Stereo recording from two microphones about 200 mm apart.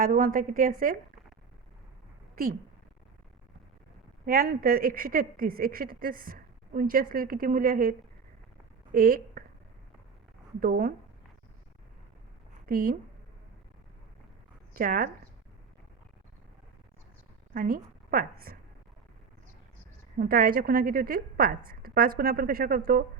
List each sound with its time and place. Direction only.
0.0 s a woman's voice: 45° right (ahead or behind)
4.3 s a woman's voice: 45° right (ahead or behind)
10.6 s a woman's voice: 45° right (ahead or behind)
12.6 s speech: 45° right (ahead or behind)
14.7 s speech: 45° right (ahead or behind)
17.5 s a woman's voice: 45° right (ahead or behind)
20.1 s a woman's voice: 45° right (ahead or behind)